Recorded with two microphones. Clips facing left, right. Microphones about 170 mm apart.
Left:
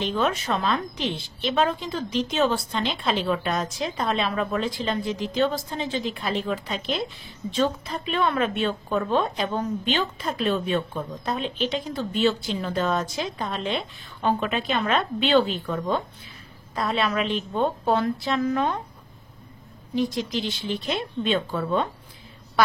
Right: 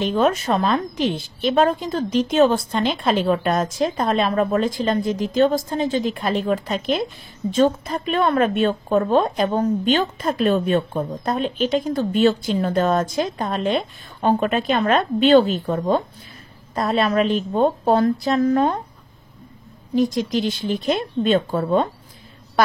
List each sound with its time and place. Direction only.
0.0 s a woman's voice: 45° right (ahead or behind)
20.0 s a woman's voice: 45° right (ahead or behind)